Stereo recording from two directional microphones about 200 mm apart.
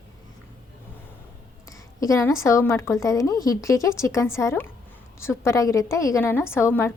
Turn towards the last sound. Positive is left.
turn(degrees=10)  # may be behind; listen again after turning